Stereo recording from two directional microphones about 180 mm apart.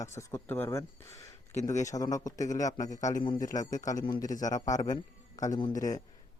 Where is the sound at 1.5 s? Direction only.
40° left (ahead or behind).